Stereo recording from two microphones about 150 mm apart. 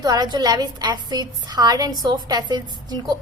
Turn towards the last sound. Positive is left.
turn(degrees=-30)  # may be behind; listen again after turning